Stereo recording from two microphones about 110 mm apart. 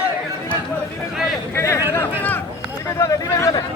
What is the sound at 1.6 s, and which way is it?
Speech, 25° left (ahead or behind).